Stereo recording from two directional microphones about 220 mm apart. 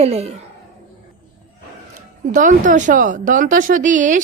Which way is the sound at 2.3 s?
35° right (ahead or behind).